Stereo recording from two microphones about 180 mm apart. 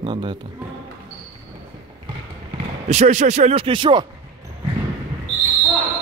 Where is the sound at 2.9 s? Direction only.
40° right (ahead or behind).